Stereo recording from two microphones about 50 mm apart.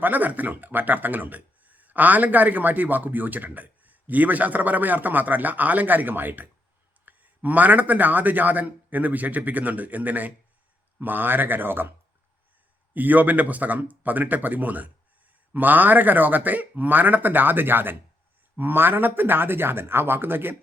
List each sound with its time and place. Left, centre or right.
0.0 s speech: right